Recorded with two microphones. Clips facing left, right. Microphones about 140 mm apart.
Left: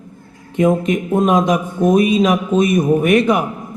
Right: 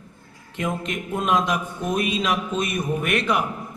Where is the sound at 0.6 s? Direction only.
45° left (ahead or behind).